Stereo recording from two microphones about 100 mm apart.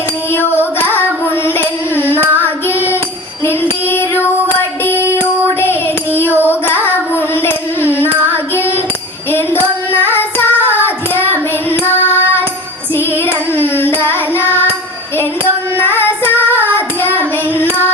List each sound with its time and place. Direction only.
0.3 s female singing: 20° left (ahead or behind)
0.6 s singing: 20° left (ahead or behind)
1.2 s carnatic music: 20° left (ahead or behind)
2.4 s child singing: 20° left (ahead or behind)
7.8 s carnatic music: 20° left (ahead or behind)
8.3 s child singing: 20° left (ahead or behind)
9.3 s jingle bell: 20° left (ahead or behind)
9.9 s child singing: 20° left (ahead or behind)
12.9 s child singing: 20° left (ahead or behind)
15.8 s child singing: 20° left (ahead or behind)